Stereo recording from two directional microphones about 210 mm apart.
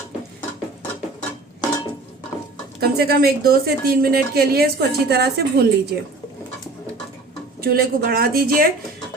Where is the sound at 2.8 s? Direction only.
45° right (ahead or behind).